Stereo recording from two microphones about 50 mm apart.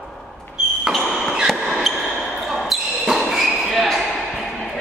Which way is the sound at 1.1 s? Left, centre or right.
Centre.